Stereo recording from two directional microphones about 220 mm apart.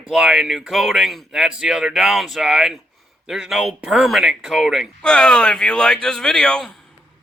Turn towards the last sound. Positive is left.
turn(degrees=5)  # may be behind; listen again after turning